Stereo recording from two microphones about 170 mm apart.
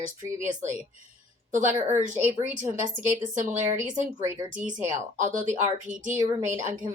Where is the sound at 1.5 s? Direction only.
45° right (ahead or behind).